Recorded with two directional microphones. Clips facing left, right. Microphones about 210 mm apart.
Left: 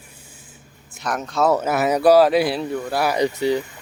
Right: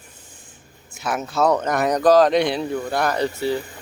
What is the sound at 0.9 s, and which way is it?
A man's voice, 5° right (ahead or behind).